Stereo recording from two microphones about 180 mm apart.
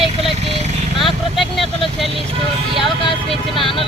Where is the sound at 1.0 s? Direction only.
Centre (ahead or behind).